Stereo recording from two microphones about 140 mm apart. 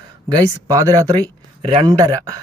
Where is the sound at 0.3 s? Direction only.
25° right (ahead or behind).